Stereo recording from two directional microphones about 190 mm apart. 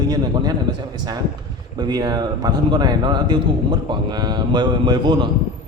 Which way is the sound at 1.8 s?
20° right (ahead or behind).